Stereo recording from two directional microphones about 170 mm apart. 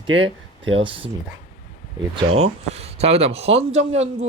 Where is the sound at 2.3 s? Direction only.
35° right (ahead or behind).